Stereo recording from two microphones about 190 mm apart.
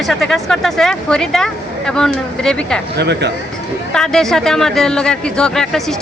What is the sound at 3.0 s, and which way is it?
Speech, 60° right (ahead or behind).